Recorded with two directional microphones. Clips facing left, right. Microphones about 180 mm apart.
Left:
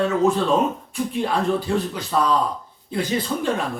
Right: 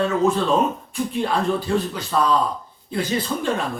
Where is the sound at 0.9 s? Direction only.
15° left (ahead or behind).